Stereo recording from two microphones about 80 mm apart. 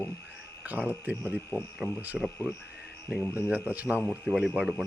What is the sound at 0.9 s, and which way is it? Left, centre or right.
Speech, right.